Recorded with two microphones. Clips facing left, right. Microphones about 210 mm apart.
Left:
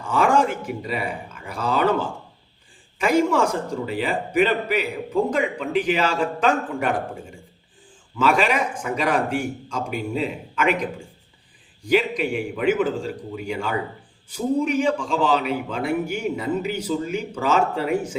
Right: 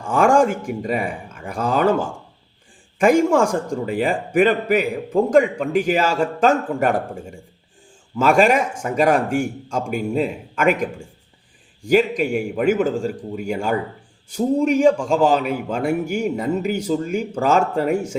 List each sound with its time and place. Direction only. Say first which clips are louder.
0.0 s a man's voice: right 4 dB; 45° right (ahead or behind)
11.9 s a man's voice: right 4 dB; 45° right (ahead or behind)